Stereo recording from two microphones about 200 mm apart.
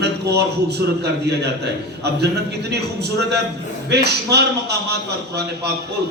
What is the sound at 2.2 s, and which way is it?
A man's voice, 55° right (ahead or behind).